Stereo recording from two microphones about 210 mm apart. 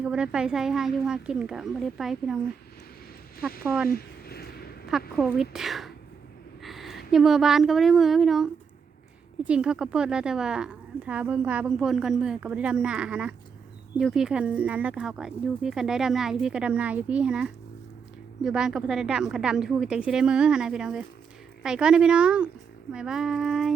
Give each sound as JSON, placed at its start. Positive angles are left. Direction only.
{"t": 0.0, "sound": "a woman's voice", "side_deg": -5}
{"t": 3.6, "sound": "speech", "side_deg": -5}
{"t": 3.8, "sound": "a sound", "side_deg": 45}
{"t": 4.9, "sound": "a woman's voice", "side_deg": 0}